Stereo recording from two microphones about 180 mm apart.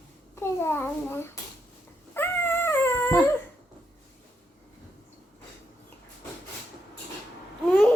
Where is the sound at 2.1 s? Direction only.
10° left (ahead or behind).